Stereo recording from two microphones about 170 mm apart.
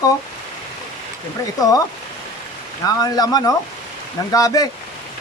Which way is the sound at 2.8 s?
20° left (ahead or behind).